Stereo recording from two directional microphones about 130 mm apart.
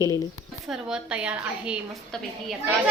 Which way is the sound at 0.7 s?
5° right (ahead or behind).